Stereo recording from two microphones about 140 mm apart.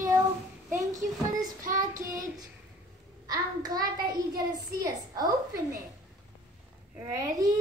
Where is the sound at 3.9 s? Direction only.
90° right.